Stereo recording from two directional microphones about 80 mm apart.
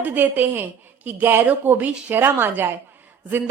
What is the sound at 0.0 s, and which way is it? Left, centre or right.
A woman's voice, right.